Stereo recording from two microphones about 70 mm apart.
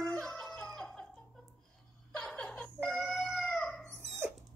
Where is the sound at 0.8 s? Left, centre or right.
Centre.